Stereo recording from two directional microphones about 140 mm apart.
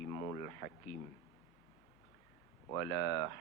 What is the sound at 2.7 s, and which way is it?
Speech, 25° left (ahead or behind).